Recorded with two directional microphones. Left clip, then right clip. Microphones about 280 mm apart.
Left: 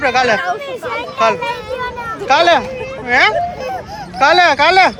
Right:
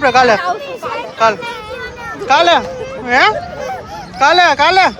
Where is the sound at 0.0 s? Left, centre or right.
Centre.